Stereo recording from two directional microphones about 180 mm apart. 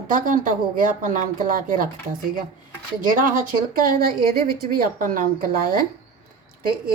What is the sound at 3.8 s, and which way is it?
Speech, 55° right (ahead or behind).